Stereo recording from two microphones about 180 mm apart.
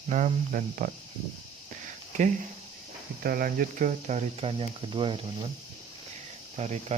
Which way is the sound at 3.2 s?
55° right (ahead or behind).